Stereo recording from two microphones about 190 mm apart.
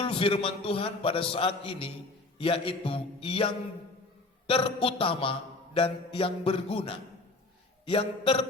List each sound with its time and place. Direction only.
0.0 s mantra: 30° left (ahead or behind)